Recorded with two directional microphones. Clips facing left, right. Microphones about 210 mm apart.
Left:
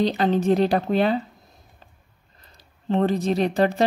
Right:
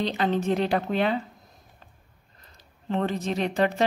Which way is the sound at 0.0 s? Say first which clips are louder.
Left 5 dB; 40° left (ahead or behind).